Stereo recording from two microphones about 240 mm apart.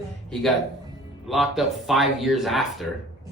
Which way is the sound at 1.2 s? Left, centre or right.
Centre.